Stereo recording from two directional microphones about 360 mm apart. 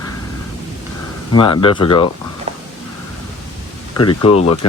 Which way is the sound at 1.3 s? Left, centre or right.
Centre.